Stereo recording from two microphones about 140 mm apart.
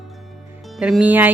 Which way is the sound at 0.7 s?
5° right (ahead or behind).